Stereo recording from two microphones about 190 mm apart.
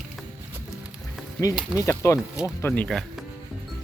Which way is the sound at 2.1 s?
5° right (ahead or behind).